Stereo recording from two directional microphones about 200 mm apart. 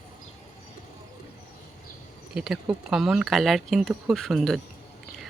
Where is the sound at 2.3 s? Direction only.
Centre (ahead or behind).